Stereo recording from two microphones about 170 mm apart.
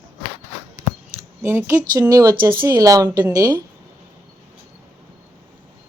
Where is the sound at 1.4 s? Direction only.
15° right (ahead or behind).